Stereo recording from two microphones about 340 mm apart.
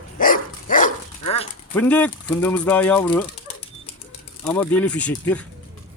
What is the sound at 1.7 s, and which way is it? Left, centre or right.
Speech, centre.